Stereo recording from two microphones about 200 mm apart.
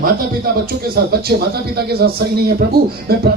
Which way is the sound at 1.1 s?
50° right (ahead or behind).